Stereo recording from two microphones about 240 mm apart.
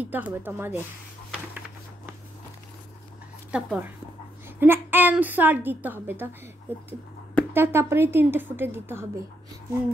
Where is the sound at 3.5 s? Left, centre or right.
Centre.